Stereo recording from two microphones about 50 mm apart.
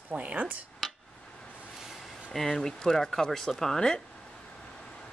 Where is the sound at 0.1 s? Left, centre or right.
Right.